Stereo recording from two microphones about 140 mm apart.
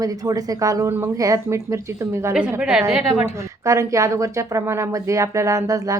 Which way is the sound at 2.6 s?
Centre (ahead or behind).